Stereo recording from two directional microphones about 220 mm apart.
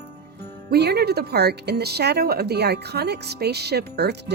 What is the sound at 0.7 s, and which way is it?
Speech, 45° right (ahead or behind).